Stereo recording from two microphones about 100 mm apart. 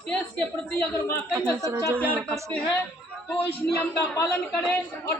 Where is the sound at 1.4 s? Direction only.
35° right (ahead or behind).